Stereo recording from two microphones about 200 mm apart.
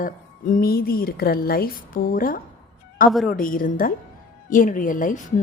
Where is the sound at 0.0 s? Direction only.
45° left (ahead or behind).